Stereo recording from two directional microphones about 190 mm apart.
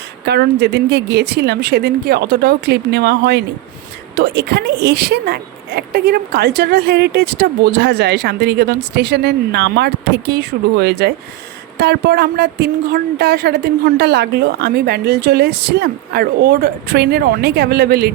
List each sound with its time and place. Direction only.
0.3 s a woman's voice: 60° right (ahead or behind)